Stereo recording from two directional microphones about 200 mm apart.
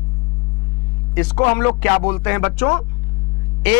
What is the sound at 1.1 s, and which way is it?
Speech, 15° left (ahead or behind).